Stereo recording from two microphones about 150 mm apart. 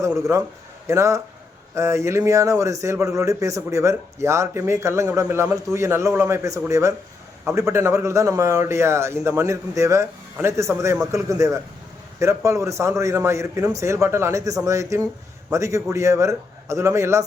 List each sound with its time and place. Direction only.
0.0 s a man's voice: 20° right (ahead or behind)